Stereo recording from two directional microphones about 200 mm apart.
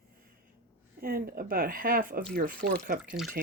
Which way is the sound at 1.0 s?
50° right (ahead or behind).